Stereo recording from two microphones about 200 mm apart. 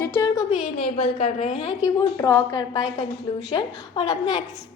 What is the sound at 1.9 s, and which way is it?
A woman's voice, 15° left (ahead or behind).